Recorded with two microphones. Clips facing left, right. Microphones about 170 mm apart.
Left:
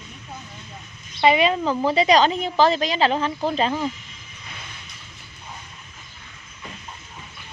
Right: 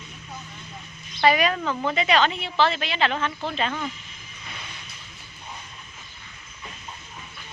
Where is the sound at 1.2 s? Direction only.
20° left (ahead or behind).